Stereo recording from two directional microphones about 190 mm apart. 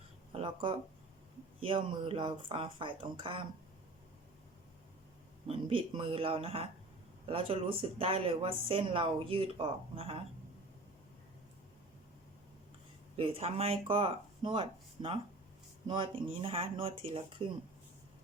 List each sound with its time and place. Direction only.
0.3 s a woman's voice: 30° right (ahead or behind)
5.5 s a woman's voice: 30° right (ahead or behind)
13.1 s a woman's voice: 30° right (ahead or behind)